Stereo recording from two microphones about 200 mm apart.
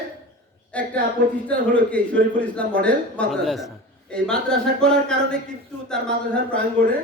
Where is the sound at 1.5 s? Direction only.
5° left (ahead or behind).